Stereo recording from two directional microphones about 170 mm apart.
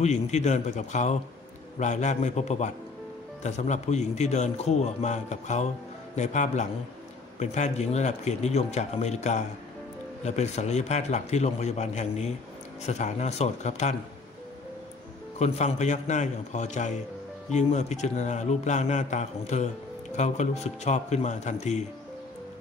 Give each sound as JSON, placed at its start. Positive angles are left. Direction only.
{"t": 0.0, "sound": "a man's voice", "side_deg": 40}
{"t": 15.3, "sound": "a man's voice", "side_deg": 40}